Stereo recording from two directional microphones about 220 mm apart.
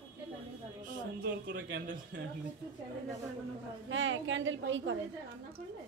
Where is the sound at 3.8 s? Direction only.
60° right (ahead or behind).